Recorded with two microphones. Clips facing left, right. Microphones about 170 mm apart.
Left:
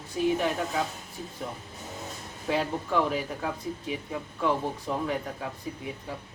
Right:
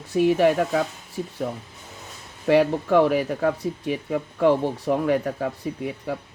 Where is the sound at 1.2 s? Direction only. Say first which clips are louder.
Right 10 dB; 60° right (ahead or behind).